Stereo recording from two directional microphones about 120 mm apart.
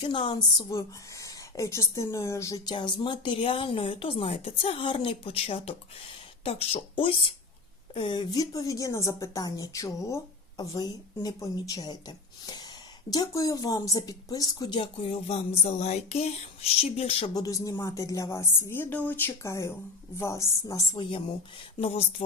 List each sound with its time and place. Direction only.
0.0 s speech: 45° left (ahead or behind)
0.7 s a woman's voice: 25° left (ahead or behind)
2.6 s a woman's voice: 40° left (ahead or behind)
14.8 s speech: 55° left (ahead or behind)
17.3 s a woman's voice: 30° left (ahead or behind)
20.9 s speech: 40° left (ahead or behind)
21.8 s speech: 55° left (ahead or behind)